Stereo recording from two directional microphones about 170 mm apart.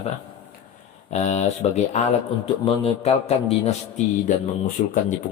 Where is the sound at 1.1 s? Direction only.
45° left (ahead or behind).